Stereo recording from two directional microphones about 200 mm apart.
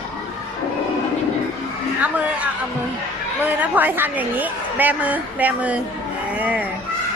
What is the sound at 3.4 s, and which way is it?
A woman's voice, 10° right (ahead or behind).